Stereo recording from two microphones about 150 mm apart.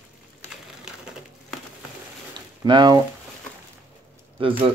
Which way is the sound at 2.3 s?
30° right (ahead or behind).